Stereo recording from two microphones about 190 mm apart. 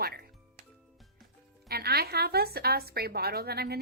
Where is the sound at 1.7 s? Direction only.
55° right (ahead or behind).